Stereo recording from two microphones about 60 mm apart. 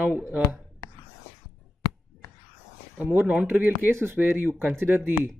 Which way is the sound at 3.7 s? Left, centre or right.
Right.